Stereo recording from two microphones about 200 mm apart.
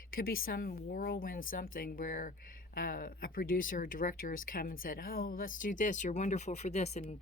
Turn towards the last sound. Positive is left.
turn(degrees=35)  # may be behind; listen again after turning